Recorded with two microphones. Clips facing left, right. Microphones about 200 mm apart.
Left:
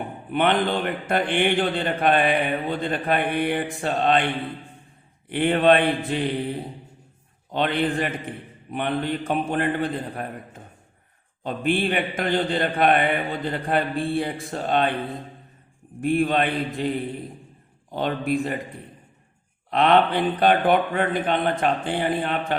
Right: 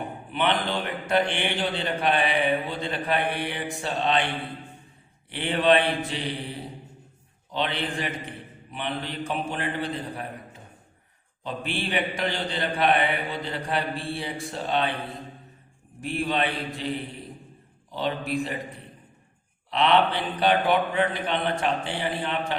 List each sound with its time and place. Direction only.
0.3 s a man's voice: 50° left (ahead or behind)
5.3 s a man's voice: 55° left (ahead or behind)
16.0 s a man's voice: 50° left (ahead or behind)
17.9 s a man's voice: 50° left (ahead or behind)
19.7 s a man's voice: 50° left (ahead or behind)